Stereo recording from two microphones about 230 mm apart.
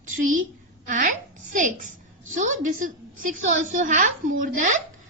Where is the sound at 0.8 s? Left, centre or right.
Right.